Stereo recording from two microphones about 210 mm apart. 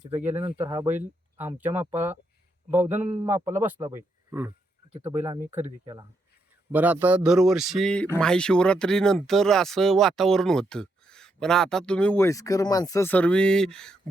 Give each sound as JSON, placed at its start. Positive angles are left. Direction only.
{"t": 0.3, "sound": "speech", "side_deg": -10}
{"t": 3.2, "sound": "speech", "side_deg": -10}
{"t": 4.9, "sound": "speech", "side_deg": -25}
{"t": 5.1, "sound": "speech", "side_deg": -10}